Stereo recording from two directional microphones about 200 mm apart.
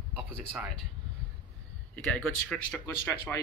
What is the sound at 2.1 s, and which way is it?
Speech, 5° left (ahead or behind).